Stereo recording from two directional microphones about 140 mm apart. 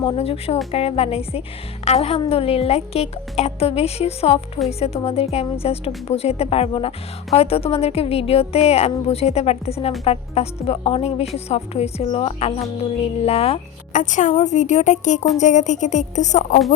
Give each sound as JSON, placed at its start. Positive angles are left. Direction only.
{"t": 0.0, "sound": "a woman's voice", "side_deg": 40}
{"t": 13.9, "sound": "a woman's voice", "side_deg": 60}